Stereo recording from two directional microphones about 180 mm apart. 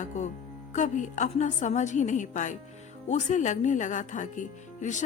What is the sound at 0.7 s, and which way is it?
Speech, 45° left (ahead or behind).